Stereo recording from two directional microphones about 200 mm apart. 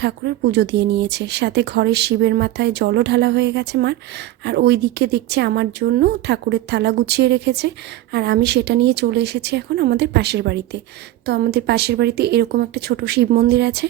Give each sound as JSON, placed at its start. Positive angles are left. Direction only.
{"t": 0.0, "sound": "speech", "side_deg": -55}